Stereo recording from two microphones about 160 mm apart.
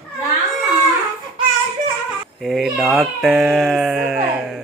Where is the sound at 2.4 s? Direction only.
Centre (ahead or behind).